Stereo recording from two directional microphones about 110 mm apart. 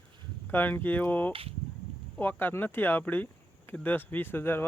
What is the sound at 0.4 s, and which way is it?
Speech, 15° left (ahead or behind).